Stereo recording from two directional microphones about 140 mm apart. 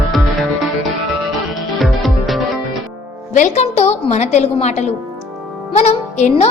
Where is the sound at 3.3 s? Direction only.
60° left (ahead or behind).